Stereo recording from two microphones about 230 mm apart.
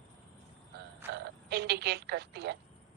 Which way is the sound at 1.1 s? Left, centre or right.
Right.